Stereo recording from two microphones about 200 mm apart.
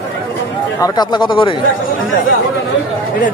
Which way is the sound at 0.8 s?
20° left (ahead or behind).